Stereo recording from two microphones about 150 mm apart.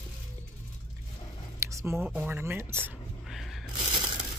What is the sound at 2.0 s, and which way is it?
Speech, 10° right (ahead or behind).